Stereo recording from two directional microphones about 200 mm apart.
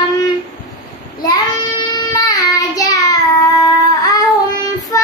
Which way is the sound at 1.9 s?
20° left (ahead or behind).